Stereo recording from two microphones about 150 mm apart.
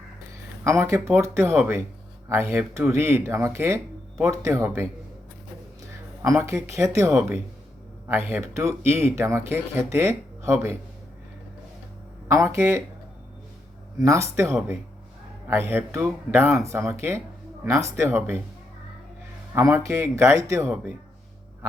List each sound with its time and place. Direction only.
0.6 s speech: 20° right (ahead or behind)
6.2 s speech: 20° right (ahead or behind)
12.3 s speech: 20° right (ahead or behind)
14.0 s speech: 20° right (ahead or behind)
15.4 s speech: 15° right (ahead or behind)
19.5 s speech: 20° right (ahead or behind)